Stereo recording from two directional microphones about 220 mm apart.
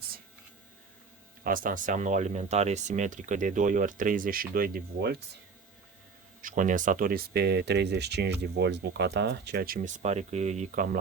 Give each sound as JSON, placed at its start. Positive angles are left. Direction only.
{"t": 1.5, "sound": "speech", "side_deg": -40}
{"t": 6.4, "sound": "speech", "side_deg": -35}